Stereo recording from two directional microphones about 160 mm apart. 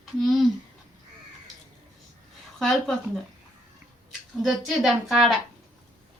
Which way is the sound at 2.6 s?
5° left (ahead or behind).